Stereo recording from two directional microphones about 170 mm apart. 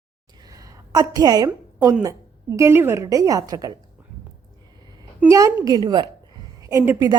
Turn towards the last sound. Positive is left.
turn(degrees=-15)  # may be behind; listen again after turning